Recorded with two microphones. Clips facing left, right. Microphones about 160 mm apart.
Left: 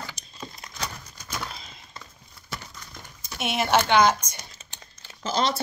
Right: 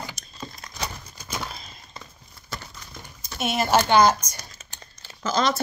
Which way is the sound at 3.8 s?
35° right (ahead or behind).